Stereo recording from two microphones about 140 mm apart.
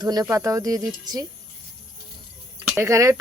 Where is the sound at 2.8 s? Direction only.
20° right (ahead or behind).